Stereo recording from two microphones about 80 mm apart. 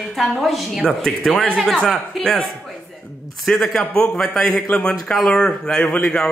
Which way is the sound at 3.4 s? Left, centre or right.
Centre.